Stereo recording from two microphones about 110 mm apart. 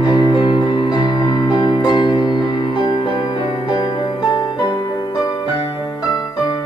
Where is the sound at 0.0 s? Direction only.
45° left (ahead or behind).